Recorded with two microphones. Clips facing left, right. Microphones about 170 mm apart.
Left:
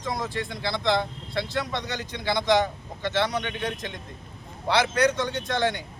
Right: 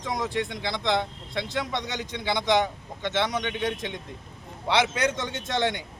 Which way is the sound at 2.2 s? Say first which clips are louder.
Left 1 dB; 20° right (ahead or behind).